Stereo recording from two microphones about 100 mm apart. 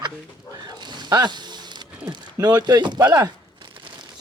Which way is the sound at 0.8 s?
45° right (ahead or behind).